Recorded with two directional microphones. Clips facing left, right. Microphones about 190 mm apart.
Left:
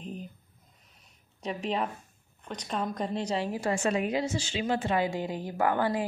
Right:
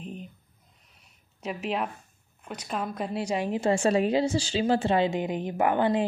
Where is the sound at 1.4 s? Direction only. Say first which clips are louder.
Right 1 dB; 5° right (ahead or behind).